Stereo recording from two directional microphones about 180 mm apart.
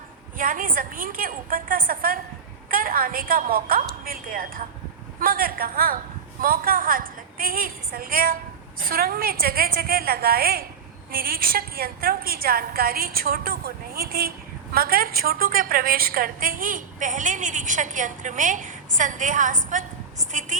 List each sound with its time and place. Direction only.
0.3 s a woman's voice: 50° right (ahead or behind)